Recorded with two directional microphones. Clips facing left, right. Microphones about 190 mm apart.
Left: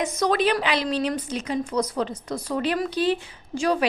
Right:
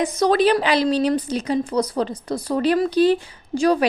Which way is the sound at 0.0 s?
35° right (ahead or behind).